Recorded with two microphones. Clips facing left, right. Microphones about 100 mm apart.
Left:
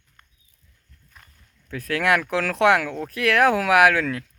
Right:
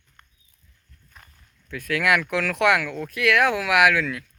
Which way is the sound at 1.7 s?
35° left (ahead or behind).